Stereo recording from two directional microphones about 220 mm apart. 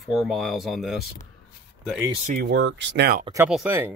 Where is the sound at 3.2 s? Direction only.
15° right (ahead or behind).